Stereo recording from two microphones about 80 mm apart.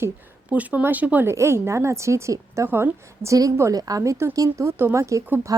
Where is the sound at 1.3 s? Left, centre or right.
Right.